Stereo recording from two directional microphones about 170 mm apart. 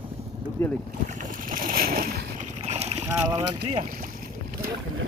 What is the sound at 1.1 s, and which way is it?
Boat, 50° right (ahead or behind).